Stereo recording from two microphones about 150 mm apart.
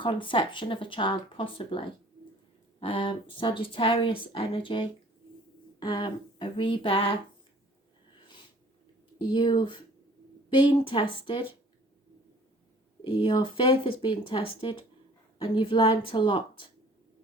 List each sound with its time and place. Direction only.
0.0 s speech: 35° left (ahead or behind)
2.8 s speech: 35° left (ahead or behind)
9.3 s speech: 30° left (ahead or behind)
13.1 s speech: 35° left (ahead or behind)